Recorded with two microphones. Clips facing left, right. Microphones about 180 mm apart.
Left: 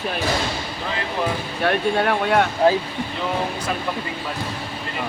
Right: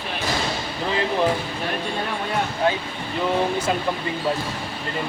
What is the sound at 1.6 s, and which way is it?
Speech, 70° left (ahead or behind).